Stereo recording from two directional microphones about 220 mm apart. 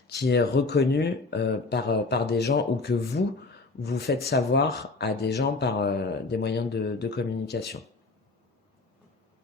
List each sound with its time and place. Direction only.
0.1 s speech: 50° left (ahead or behind)